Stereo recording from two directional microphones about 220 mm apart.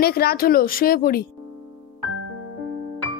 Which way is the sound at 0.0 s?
45° left (ahead or behind).